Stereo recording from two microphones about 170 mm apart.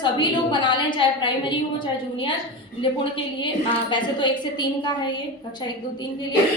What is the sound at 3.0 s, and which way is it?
A woman's voice, 30° left (ahead or behind).